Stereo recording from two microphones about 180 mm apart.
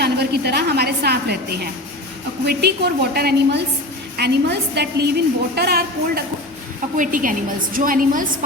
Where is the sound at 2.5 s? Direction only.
65° right (ahead or behind).